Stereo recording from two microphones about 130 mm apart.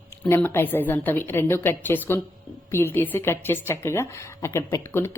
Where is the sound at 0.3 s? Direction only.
15° left (ahead or behind).